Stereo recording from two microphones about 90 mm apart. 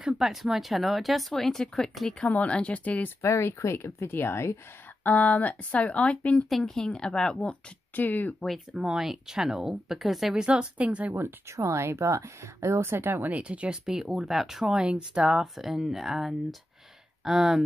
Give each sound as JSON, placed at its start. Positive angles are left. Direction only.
{"t": 0.0, "sound": "speech", "side_deg": 0}
{"t": 3.2, "sound": "speech", "side_deg": 30}
{"t": 5.0, "sound": "speech", "side_deg": 20}
{"t": 7.9, "sound": "speech", "side_deg": 20}
{"t": 8.5, "sound": "speech", "side_deg": -5}
{"t": 11.1, "sound": "speech", "side_deg": -30}